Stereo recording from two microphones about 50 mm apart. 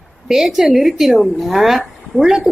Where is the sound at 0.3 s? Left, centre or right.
Centre.